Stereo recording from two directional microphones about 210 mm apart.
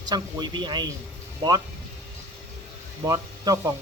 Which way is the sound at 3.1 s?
15° right (ahead or behind).